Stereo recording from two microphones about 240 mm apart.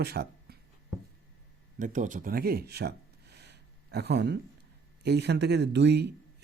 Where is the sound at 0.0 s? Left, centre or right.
Right.